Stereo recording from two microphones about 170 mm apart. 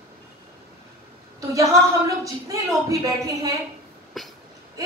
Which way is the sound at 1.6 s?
20° right (ahead or behind).